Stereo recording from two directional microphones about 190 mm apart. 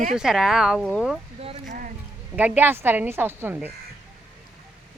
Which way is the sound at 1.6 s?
45° right (ahead or behind).